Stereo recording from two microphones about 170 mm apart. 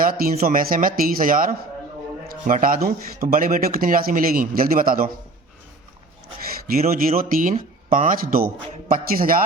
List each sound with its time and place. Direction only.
0.0 s a man's voice: 55° right (ahead or behind)
6.7 s a man's voice: 55° right (ahead or behind)